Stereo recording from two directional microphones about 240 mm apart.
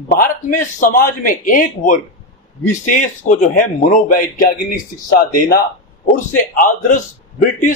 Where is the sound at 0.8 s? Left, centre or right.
Left.